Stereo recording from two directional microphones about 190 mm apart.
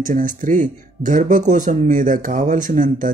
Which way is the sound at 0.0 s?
45° right (ahead or behind).